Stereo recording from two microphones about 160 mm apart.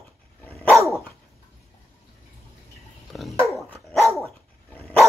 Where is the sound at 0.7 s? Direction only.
20° right (ahead or behind).